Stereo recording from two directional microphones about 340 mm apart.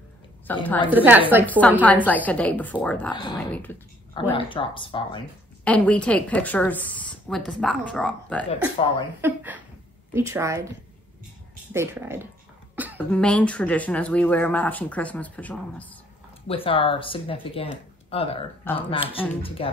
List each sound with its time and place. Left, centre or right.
0.5 s a woman's voice: centre
0.9 s a woman's voice: centre
5.6 s a woman's voice: centre
8.5 s speech: centre
9.2 s a woman's voice: centre
11.7 s a woman's voice: centre
16.4 s speech: centre